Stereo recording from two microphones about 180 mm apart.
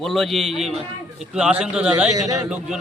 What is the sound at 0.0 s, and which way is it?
A man's voice, centre (ahead or behind).